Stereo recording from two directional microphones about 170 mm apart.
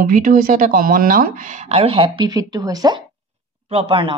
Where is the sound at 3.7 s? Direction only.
35° right (ahead or behind).